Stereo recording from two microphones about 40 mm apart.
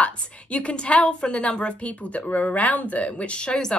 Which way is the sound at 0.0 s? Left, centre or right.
Left.